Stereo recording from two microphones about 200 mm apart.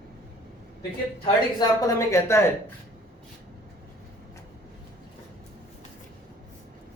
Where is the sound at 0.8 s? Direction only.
20° left (ahead or behind).